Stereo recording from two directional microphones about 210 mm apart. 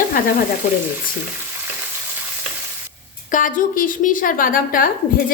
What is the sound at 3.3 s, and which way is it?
A woman's voice, 40° left (ahead or behind).